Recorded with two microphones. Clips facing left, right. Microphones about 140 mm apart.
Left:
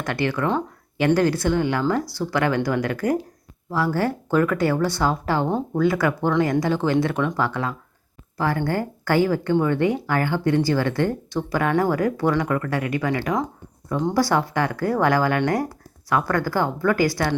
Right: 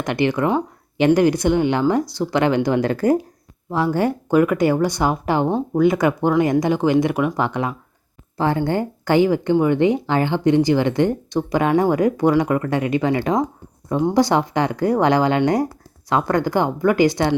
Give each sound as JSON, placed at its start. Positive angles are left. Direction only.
{"t": 0.0, "sound": "a woman's voice", "side_deg": -20}